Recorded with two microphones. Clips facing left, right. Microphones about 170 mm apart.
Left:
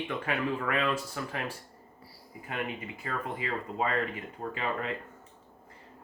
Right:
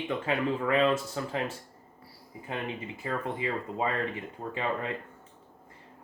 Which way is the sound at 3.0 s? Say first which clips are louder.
Right 4 dB; 25° right (ahead or behind).